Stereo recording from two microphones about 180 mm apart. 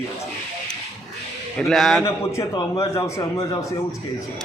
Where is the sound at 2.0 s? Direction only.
15° left (ahead or behind).